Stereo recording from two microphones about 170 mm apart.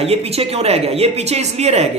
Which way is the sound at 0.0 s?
35° right (ahead or behind).